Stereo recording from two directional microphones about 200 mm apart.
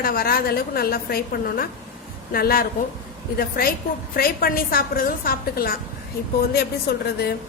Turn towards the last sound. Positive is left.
turn(degrees=50)  # may be behind; listen again after turning